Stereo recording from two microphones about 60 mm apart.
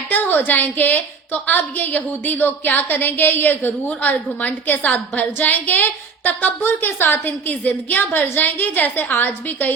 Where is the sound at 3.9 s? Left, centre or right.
Left.